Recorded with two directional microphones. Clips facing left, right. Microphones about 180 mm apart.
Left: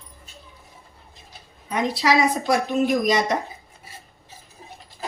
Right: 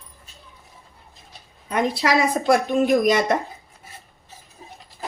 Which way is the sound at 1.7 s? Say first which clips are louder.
Even; 55° right (ahead or behind).